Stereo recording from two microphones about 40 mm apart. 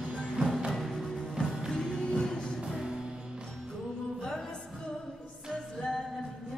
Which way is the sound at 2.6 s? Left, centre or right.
Centre.